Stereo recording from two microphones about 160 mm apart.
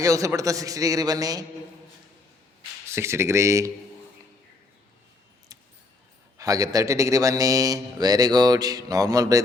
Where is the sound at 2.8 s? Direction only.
15° right (ahead or behind).